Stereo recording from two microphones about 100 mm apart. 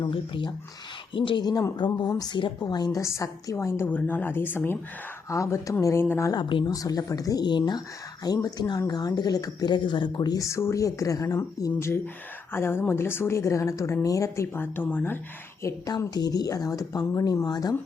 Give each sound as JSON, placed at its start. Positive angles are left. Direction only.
{"t": 0.0, "sound": "speech", "side_deg": 55}
{"t": 1.8, "sound": "a woman's voice", "side_deg": 45}
{"t": 3.0, "sound": "speech", "side_deg": 30}
{"t": 3.8, "sound": "speech", "side_deg": 15}
{"t": 5.3, "sound": "speech", "side_deg": 30}
{"t": 6.3, "sound": "a woman's voice", "side_deg": 55}
{"t": 6.7, "sound": "speech", "side_deg": 40}
{"t": 15.6, "sound": "speech", "side_deg": 30}
{"t": 16.0, "sound": "speech", "side_deg": 45}